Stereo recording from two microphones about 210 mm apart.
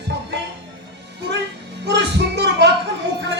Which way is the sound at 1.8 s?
55° right (ahead or behind).